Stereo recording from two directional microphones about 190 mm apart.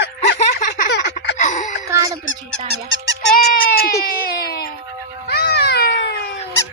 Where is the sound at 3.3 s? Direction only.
50° left (ahead or behind).